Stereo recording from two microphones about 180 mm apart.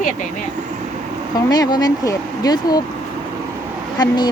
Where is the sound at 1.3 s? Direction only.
20° left (ahead or behind).